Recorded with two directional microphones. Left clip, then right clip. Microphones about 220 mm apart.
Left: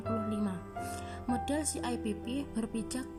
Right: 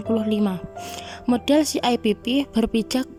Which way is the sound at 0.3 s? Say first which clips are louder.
Right 13 dB; 40° right (ahead or behind).